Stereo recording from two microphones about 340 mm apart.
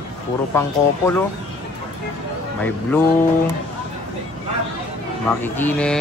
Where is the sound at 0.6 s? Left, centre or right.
Centre.